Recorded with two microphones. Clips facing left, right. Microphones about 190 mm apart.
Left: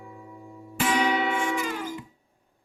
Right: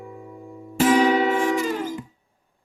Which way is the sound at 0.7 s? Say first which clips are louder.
Right 7 dB; 40° right (ahead or behind).